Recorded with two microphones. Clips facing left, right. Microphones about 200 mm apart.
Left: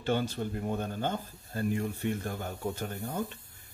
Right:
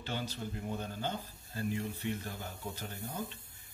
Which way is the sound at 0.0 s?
50° left (ahead or behind).